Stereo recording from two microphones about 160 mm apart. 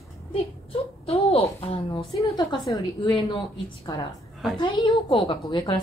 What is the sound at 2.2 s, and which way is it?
A woman's voice, 25° left (ahead or behind).